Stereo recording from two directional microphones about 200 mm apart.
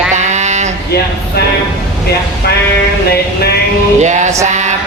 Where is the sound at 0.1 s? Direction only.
35° right (ahead or behind).